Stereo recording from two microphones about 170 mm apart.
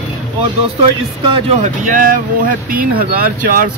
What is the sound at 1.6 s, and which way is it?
A man's voice, 50° right (ahead or behind).